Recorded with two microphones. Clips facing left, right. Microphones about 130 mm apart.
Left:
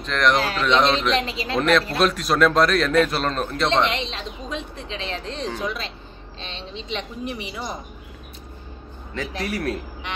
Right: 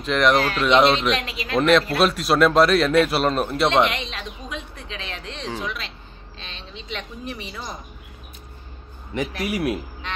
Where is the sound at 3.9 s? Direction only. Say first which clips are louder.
Left 2 dB; 30° left (ahead or behind).